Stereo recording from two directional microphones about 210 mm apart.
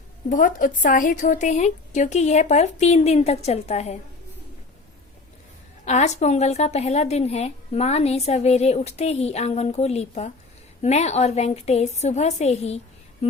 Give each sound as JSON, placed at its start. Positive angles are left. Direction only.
{"t": 0.3, "sound": "a woman's voice", "side_deg": 40}
{"t": 5.8, "sound": "a woman's voice", "side_deg": 35}